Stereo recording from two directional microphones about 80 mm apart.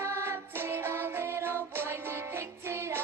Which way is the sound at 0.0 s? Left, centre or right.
Right.